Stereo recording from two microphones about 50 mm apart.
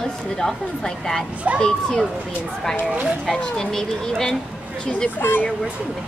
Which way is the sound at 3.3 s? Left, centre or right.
Centre.